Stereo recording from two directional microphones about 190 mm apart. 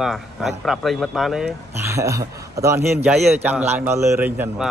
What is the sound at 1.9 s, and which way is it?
A man's voice, 15° right (ahead or behind).